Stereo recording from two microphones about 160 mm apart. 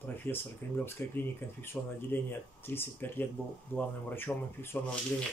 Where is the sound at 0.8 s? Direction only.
15° left (ahead or behind).